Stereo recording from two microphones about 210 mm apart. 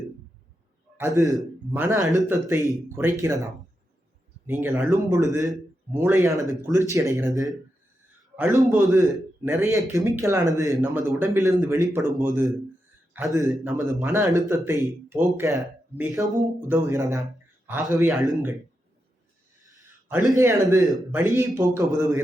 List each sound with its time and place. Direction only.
0.9 s a man's voice: 15° right (ahead or behind)
8.4 s a man's voice: 5° right (ahead or behind)
8.9 s speech: 15° right (ahead or behind)
11.1 s a man's voice: centre (ahead or behind)
11.3 s a man's voice: 15° right (ahead or behind)
18.0 s a man's voice: centre (ahead or behind)
20.1 s speech: 15° right (ahead or behind)